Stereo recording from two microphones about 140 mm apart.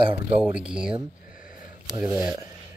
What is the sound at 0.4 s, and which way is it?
Speech, 10° right (ahead or behind).